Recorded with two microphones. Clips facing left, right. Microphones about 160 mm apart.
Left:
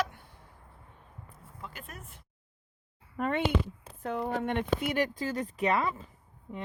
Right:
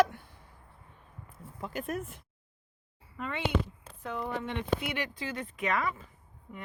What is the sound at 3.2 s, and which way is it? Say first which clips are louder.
Speech: left 7 dB; 50° left (ahead or behind).